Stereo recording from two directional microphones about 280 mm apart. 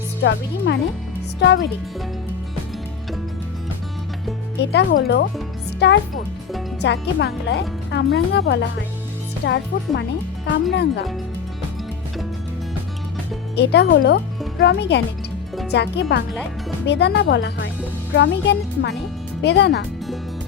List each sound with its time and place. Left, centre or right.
0.2 s speech: left
4.6 s speech: left
13.6 s speech: left